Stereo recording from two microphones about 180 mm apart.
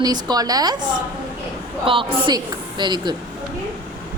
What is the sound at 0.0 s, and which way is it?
A woman's voice, 20° right (ahead or behind).